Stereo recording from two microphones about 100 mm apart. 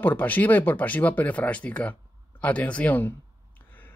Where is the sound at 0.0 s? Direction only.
15° left (ahead or behind).